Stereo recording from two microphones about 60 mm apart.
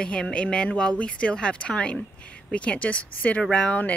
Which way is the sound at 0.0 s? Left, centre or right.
Centre.